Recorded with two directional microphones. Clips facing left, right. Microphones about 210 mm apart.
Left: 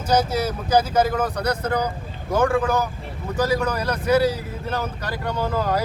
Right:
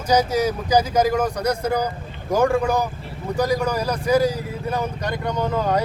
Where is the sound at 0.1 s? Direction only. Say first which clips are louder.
Right 2 dB; 10° right (ahead or behind).